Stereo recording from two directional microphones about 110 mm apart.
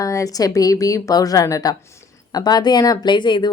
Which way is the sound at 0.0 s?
30° left (ahead or behind).